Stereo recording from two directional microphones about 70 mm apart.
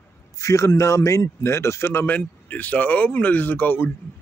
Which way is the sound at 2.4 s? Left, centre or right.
Left.